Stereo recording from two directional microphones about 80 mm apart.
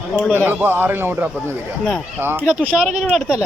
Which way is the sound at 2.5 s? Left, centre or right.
Centre.